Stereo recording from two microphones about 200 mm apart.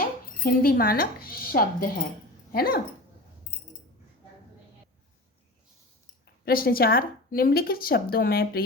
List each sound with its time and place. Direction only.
0.0 s a woman's voice: 45° left (ahead or behind)
6.4 s a woman's voice: 50° left (ahead or behind)